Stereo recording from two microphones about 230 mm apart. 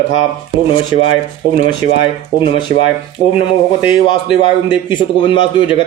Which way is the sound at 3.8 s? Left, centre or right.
Left.